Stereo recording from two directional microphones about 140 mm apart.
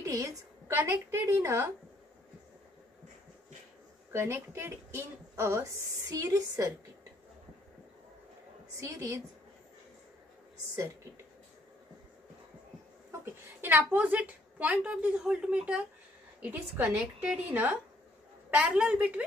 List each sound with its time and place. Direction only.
0.0 s a woman's voice: 25° right (ahead or behind)
4.1 s speech: 20° right (ahead or behind)
8.7 s speech: 20° right (ahead or behind)
13.2 s a woman's voice: 15° right (ahead or behind)